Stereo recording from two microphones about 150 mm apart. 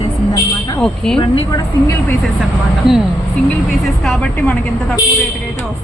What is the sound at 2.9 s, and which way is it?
Speech, centre (ahead or behind).